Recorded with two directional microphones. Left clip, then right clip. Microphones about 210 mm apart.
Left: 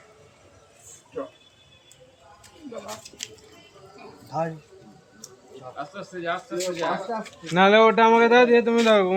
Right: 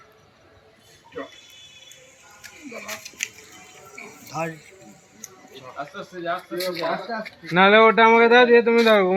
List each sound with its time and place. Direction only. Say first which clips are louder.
6.0 s speech: right 1 dB; 35° right (ahead or behind)
6.6 s speech: even; centre (ahead or behind)
7.4 s speech: right 2 dB; 10° right (ahead or behind)